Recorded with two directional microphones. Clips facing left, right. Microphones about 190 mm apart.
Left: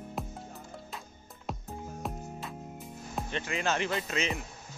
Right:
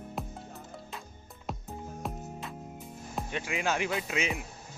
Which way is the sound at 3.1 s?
10° right (ahead or behind).